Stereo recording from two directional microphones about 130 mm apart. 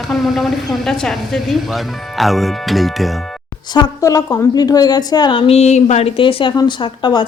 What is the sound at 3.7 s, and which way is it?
Speech, 30° left (ahead or behind).